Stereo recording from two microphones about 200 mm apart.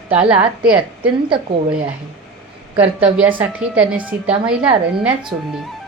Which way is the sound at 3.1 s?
5° right (ahead or behind).